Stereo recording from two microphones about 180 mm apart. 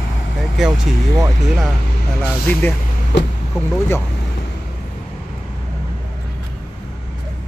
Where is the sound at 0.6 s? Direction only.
Centre (ahead or behind).